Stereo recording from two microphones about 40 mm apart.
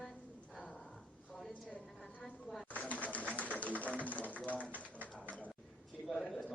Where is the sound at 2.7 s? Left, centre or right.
Left.